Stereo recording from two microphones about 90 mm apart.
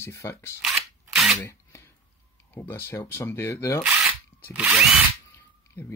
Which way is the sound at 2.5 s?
25° left (ahead or behind).